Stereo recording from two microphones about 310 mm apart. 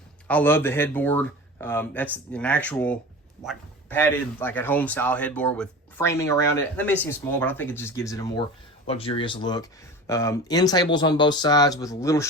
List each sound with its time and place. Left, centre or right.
0.3 s speech: centre